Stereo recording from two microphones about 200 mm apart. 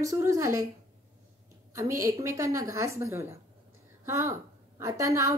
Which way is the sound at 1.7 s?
15° right (ahead or behind).